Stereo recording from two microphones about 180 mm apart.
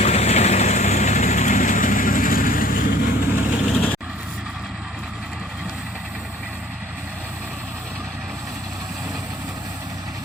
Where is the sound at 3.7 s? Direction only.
5° left (ahead or behind).